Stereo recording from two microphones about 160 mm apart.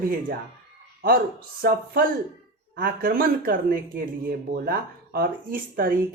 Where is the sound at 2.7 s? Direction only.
75° right (ahead or behind).